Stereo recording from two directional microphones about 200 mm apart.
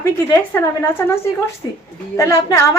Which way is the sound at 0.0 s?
15° left (ahead or behind).